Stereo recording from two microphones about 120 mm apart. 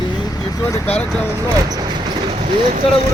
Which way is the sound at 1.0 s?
10° left (ahead or behind).